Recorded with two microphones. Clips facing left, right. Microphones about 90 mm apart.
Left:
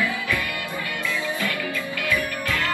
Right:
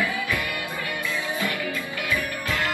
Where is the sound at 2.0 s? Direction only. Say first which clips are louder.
Left 2 dB; 20° right (ahead or behind).